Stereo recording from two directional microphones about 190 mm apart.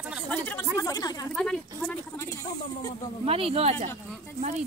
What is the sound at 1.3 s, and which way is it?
A woman's voice, 5° left (ahead or behind).